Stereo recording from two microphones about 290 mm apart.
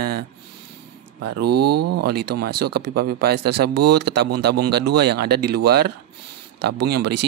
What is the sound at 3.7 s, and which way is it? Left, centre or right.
Speech, right.